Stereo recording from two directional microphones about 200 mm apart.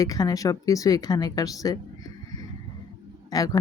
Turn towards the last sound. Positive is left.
turn(degrees=20)  # may be behind; listen again after turning